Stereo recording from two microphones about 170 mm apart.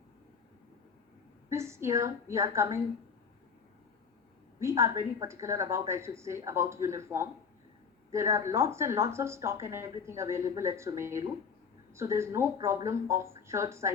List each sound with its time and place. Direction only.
1.5 s speech: 15° right (ahead or behind)
4.6 s speech: 15° right (ahead or behind)